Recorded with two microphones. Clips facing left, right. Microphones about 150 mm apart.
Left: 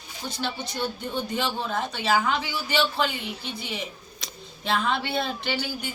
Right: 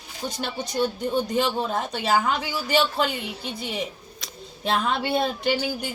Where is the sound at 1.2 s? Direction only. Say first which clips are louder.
Right 5 dB; 40° right (ahead or behind).